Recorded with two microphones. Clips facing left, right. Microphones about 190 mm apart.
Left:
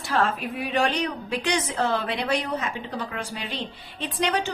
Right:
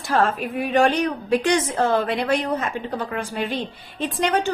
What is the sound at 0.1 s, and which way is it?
A woman's voice, 45° right (ahead or behind).